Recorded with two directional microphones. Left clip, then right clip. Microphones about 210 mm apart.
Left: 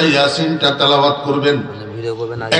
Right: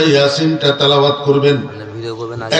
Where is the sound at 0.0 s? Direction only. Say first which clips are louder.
Right 2 dB; 55° left (ahead or behind).